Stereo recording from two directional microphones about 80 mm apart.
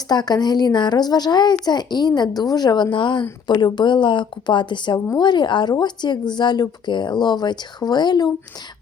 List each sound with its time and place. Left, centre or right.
0.1 s speech: left
3.4 s speech: left
5.1 s speech: left